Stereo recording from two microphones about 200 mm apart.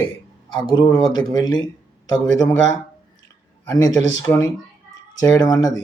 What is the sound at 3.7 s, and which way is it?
Speech, 15° left (ahead or behind).